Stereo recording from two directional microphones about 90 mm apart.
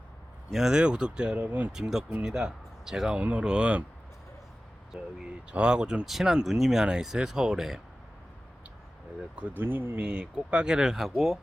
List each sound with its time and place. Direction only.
0.5 s speech: 5° right (ahead or behind)
1.7 s speech: 5° right (ahead or behind)
4.9 s speech: 10° right (ahead or behind)
9.3 s speech: 20° right (ahead or behind)